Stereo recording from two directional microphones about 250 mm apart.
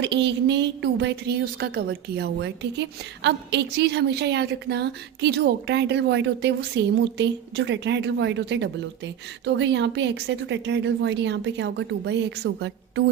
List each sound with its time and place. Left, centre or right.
0.0 s a woman's voice: right